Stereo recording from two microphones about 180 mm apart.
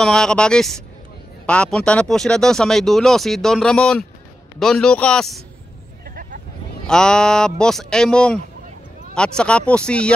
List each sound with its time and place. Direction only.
0.0 s speech: 5° left (ahead or behind)
6.0 s hubbub: 50° right (ahead or behind)
6.9 s speech: 5° left (ahead or behind)